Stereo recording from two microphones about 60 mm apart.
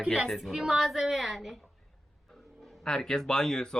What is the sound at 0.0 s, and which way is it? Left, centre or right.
Speech, centre.